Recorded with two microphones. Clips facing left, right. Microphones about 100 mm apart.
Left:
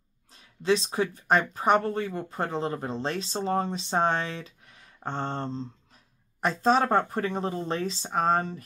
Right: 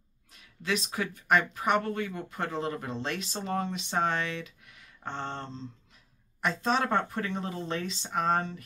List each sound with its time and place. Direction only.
0.3 s speech: 30° left (ahead or behind)